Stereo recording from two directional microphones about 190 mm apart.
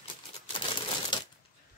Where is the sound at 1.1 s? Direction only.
25° left (ahead or behind).